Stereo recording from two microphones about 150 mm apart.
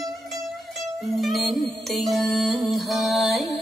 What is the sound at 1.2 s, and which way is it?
Music, centre (ahead or behind).